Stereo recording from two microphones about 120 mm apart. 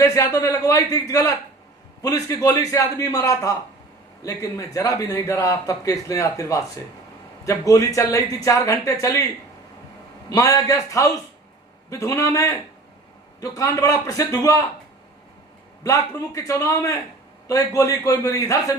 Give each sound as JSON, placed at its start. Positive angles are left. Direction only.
{"t": 0.0, "sound": "a man's voice", "side_deg": 30}
{"t": 10.2, "sound": "a man's voice", "side_deg": 30}
{"t": 15.8, "sound": "a man's voice", "side_deg": 25}